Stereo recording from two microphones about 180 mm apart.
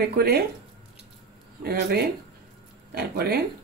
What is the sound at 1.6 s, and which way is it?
Speech, 60° right (ahead or behind).